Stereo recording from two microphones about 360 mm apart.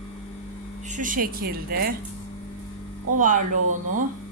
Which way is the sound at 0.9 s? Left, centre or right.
Right.